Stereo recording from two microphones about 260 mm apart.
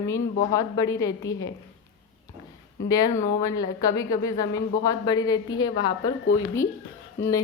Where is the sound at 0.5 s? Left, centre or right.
Centre.